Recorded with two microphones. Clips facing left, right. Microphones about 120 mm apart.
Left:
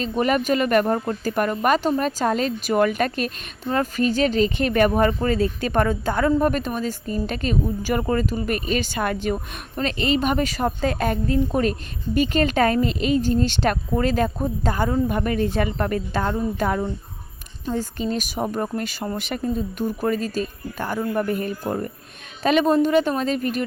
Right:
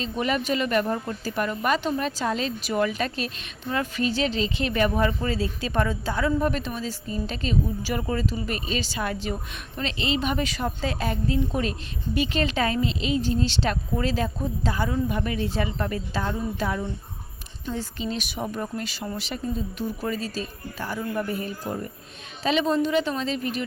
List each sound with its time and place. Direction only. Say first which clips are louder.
0.0 s speech: left 5 dB; 50° left (ahead or behind)